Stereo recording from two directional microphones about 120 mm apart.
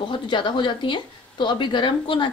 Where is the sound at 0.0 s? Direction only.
40° left (ahead or behind).